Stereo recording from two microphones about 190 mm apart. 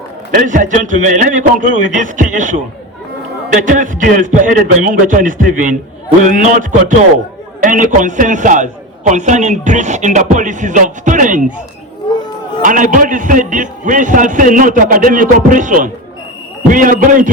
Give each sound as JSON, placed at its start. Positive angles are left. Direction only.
{"t": 0.3, "sound": "a man's voice", "side_deg": -45}
{"t": 12.6, "sound": "a man's voice", "side_deg": -45}